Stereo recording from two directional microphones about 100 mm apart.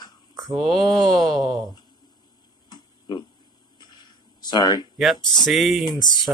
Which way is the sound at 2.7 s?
50° left (ahead or behind).